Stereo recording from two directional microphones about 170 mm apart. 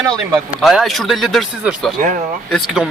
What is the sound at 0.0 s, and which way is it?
Speech, 20° right (ahead or behind).